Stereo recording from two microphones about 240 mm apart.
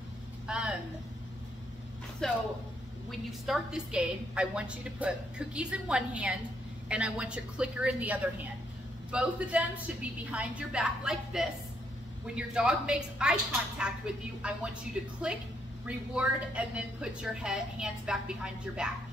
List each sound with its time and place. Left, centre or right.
0.5 s a woman's voice: centre
2.2 s a woman's voice: centre